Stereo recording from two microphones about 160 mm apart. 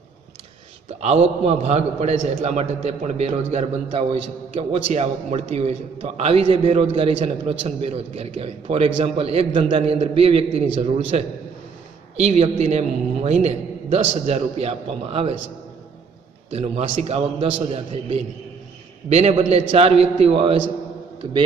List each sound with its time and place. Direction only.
1.0 s a man's voice: 40° right (ahead or behind)
16.4 s a man's voice: 40° right (ahead or behind)